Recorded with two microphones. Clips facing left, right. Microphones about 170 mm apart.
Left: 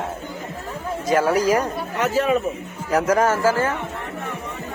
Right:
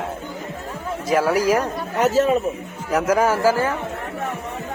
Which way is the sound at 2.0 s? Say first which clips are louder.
Right 3 dB; 35° right (ahead or behind).